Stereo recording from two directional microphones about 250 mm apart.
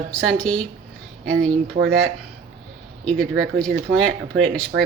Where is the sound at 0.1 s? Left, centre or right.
Centre.